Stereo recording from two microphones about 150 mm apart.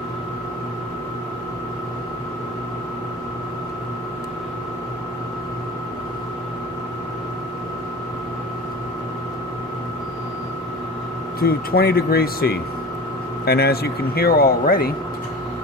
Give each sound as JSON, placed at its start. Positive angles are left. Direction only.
{"t": 11.3, "sound": "speech", "side_deg": 90}